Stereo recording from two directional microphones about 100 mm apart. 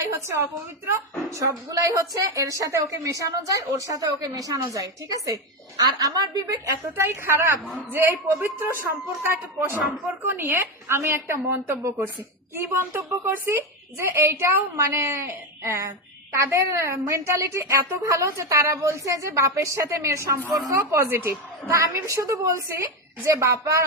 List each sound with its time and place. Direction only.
0.0 s a woman's voice: 30° right (ahead or behind)
6.9 s a woman's voice: 25° right (ahead or behind)
7.6 s a man's voice: 10° left (ahead or behind)
7.9 s a woman's voice: 20° right (ahead or behind)